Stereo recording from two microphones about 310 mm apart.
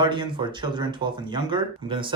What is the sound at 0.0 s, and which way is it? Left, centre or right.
Speech, centre.